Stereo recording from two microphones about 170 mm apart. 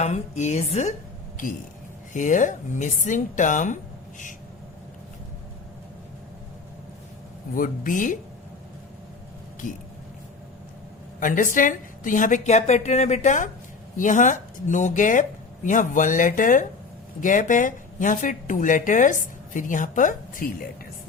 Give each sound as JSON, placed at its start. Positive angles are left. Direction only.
{"t": 0.0, "sound": "a woman's voice", "side_deg": 40}
{"t": 1.4, "sound": "speech", "side_deg": 50}
{"t": 7.5, "sound": "speech", "side_deg": 50}
{"t": 11.2, "sound": "speech", "side_deg": 50}